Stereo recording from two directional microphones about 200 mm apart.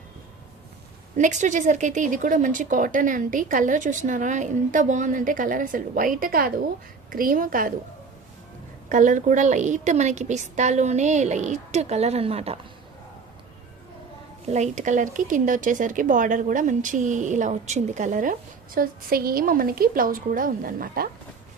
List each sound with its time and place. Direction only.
1.1 s a woman's voice: 35° right (ahead or behind)
8.9 s speech: 40° right (ahead or behind)
14.5 s speech: 35° right (ahead or behind)